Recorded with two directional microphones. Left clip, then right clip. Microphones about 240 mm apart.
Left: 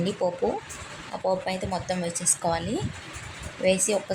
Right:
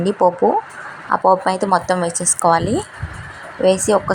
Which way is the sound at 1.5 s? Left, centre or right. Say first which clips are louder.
Right 13 dB; centre.